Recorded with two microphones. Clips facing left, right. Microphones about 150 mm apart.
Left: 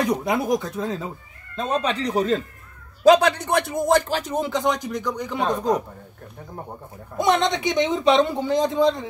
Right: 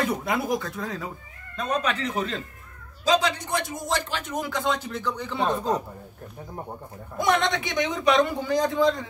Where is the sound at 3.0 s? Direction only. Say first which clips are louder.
Left 8 dB; 60° left (ahead or behind).